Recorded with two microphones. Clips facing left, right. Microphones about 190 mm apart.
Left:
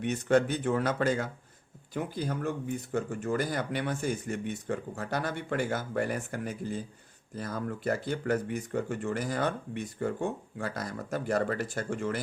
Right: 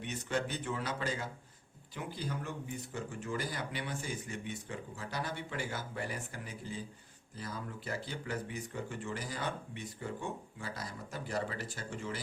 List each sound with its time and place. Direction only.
0.0 s speech: 50° left (ahead or behind)